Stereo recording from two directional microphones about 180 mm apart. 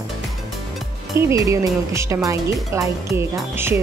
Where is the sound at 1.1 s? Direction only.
15° right (ahead or behind).